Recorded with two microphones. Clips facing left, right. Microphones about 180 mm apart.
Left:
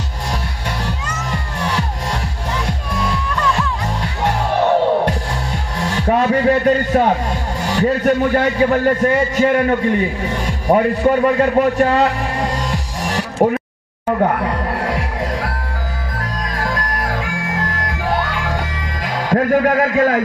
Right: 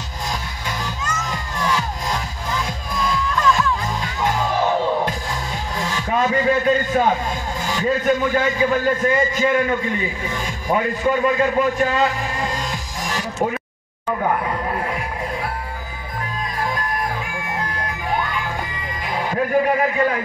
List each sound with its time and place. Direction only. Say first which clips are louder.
0.8 s music: left 2 dB; 65° left (ahead or behind)
5.8 s a sound: left 5 dB; 65° left (ahead or behind)
7.6 s a man's voice: left 4 dB; 65° left (ahead or behind)
13.4 s a sound: left 8 dB; 60° left (ahead or behind)
14.1 s music: left 4 dB; 60° left (ahead or behind); by 15.5 s 90° left
16.5 s music: left 1 dB; 90° left